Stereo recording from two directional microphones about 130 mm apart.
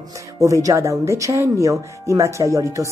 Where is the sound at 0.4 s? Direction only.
25° right (ahead or behind).